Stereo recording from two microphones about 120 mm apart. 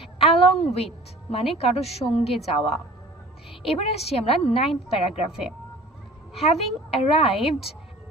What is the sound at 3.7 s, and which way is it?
Speech, 60° left (ahead or behind).